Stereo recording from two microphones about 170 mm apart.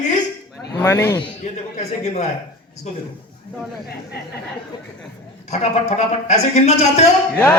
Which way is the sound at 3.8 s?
65° left (ahead or behind).